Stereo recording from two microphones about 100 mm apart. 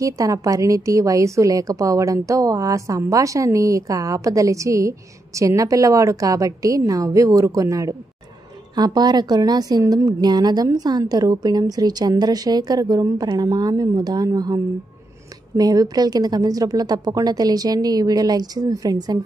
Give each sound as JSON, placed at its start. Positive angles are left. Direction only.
{"t": 0.0, "sound": "a woman's voice", "side_deg": -35}
{"t": 8.7, "sound": "a woman's voice", "side_deg": -45}